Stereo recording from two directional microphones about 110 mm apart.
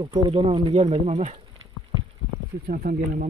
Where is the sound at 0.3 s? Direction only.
65° right (ahead or behind).